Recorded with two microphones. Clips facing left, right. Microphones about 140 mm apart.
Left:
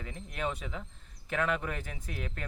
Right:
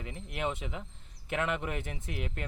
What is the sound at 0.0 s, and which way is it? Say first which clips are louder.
Speech: right 1 dB; 20° right (ahead or behind).